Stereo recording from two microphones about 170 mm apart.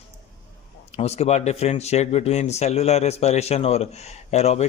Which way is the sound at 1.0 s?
40° left (ahead or behind).